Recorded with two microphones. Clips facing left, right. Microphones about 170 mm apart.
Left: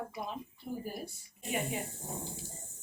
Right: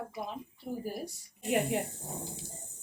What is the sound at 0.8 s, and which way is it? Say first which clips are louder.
A woman's voice: right 3 dB; 75° right (ahead or behind).